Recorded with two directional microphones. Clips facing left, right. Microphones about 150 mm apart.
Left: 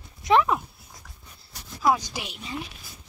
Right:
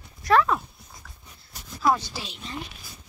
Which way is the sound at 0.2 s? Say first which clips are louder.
Even; 20° left (ahead or behind).